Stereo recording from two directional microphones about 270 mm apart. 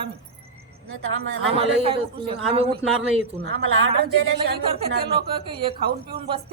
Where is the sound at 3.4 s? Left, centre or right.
Right.